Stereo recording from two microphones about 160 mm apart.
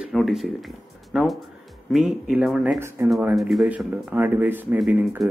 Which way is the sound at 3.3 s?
Centre (ahead or behind).